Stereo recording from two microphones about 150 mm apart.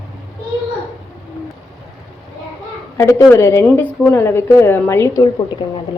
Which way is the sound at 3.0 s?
20° left (ahead or behind).